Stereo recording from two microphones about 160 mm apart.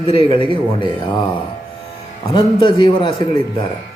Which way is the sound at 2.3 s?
30° left (ahead or behind).